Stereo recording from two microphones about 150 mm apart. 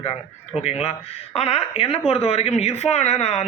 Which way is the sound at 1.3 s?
40° left (ahead or behind).